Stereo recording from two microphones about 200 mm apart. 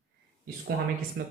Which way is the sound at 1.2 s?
55° right (ahead or behind).